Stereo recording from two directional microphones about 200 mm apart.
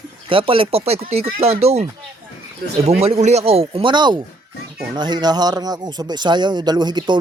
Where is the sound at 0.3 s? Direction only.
25° right (ahead or behind).